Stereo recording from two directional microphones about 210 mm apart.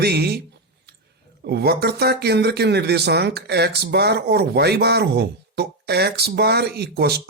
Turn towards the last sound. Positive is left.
turn(degrees=-50)  # may be behind; listen again after turning